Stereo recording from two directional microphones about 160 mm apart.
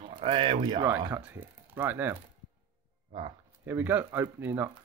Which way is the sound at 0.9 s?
15° right (ahead or behind).